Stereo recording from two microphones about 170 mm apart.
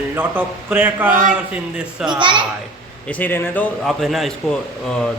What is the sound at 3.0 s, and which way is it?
Speech, 10° left (ahead or behind).